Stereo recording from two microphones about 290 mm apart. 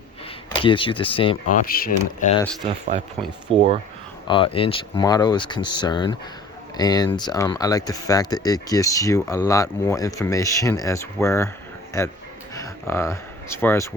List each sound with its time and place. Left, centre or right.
0.5 s speech: centre
3.5 s speech: centre
4.3 s speech: centre